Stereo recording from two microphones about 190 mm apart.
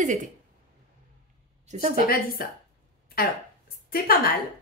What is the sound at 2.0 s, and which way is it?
Speech, 50° left (ahead or behind).